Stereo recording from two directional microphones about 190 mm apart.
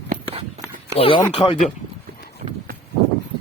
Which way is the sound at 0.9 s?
30° left (ahead or behind).